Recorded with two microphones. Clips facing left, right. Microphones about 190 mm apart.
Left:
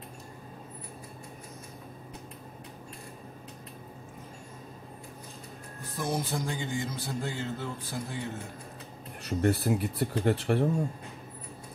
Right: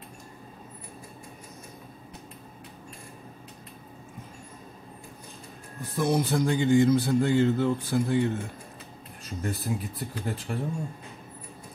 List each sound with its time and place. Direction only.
6.0 s a man's voice: 70° right (ahead or behind)
9.2 s speech: 65° left (ahead or behind)